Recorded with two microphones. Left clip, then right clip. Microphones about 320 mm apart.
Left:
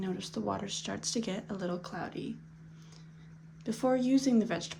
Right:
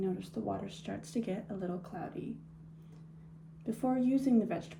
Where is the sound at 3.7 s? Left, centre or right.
Centre.